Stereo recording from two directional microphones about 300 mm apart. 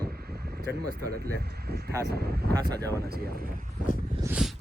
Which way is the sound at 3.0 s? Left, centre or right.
Right.